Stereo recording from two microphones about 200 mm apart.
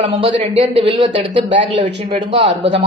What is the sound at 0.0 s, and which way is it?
Speech, 25° right (ahead or behind).